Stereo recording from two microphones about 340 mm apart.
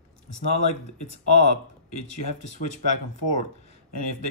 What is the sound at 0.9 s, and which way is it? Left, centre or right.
Speech, left.